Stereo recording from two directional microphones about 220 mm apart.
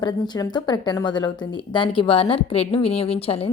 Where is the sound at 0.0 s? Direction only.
20° left (ahead or behind).